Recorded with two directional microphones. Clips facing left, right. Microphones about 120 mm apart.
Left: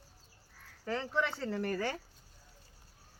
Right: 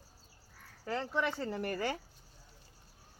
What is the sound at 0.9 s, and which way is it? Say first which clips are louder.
Speech: even; 10° right (ahead or behind).